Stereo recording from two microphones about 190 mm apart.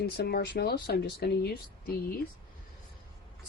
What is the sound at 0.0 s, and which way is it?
Speech, 55° left (ahead or behind).